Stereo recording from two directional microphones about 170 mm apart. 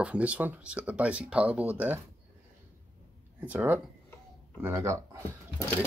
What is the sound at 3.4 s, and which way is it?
Speech, 10° right (ahead or behind).